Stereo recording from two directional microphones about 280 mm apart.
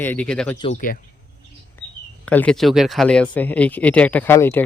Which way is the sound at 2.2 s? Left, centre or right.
Centre.